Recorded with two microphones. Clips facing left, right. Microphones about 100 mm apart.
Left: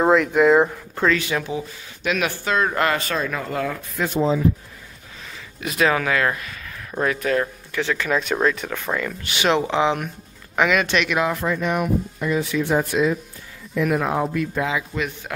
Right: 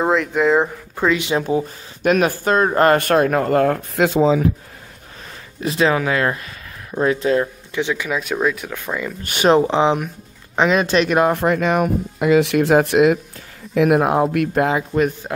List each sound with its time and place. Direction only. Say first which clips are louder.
0.0 s speech: left 1 dB; centre (ahead or behind)
0.9 s speech: right 3 dB; 15° right (ahead or behind)
1.4 s speech: right 8 dB; 40° right (ahead or behind)
3.0 s speech: right 9 dB; 60° right (ahead or behind)
3.9 s speech: right 3 dB; 90° right
5.6 s speech: right 3 dB; 30° right (ahead or behind); by 9.1 s 10° right (ahead or behind)
9.2 s speech: right 7 dB; 45° right (ahead or behind)
9.6 s speech: right 4 dB; 30° right (ahead or behind)
11.3 s speech: right 5 dB; 65° right (ahead or behind)
13.7 s speech: right 6 dB; 60° right (ahead or behind)